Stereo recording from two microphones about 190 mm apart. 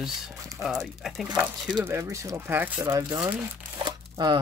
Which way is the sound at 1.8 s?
15° right (ahead or behind).